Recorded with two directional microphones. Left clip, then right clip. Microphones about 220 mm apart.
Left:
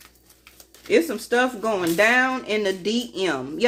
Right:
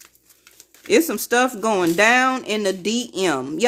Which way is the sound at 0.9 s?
50° right (ahead or behind).